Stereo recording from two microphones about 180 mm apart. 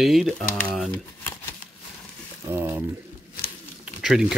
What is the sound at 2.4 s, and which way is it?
Speech, 10° right (ahead or behind).